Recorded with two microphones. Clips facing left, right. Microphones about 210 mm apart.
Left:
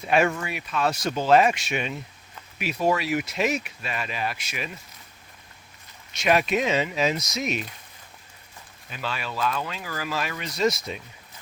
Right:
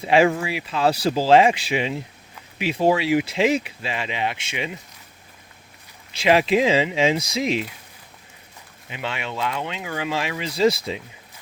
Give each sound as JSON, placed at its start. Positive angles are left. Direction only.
{"t": 0.0, "sound": "speech", "side_deg": -30}
{"t": 6.1, "sound": "speech", "side_deg": -25}
{"t": 8.9, "sound": "speech", "side_deg": -20}